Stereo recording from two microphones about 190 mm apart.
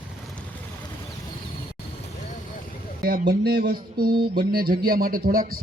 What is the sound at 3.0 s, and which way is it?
A man's voice, 50° right (ahead or behind).